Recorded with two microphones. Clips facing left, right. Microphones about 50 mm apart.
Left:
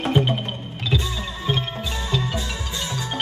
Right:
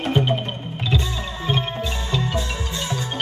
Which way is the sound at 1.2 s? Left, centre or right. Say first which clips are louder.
Right 1 dB; centre.